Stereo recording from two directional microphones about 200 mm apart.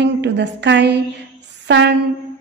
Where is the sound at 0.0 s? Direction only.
60° right (ahead or behind).